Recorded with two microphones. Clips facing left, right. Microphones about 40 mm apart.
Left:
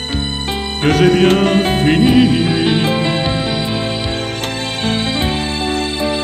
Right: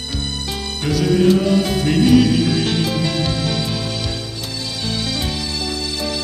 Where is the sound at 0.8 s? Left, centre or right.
Left.